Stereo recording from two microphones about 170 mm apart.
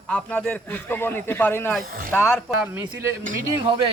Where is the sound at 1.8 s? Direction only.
60° right (ahead or behind).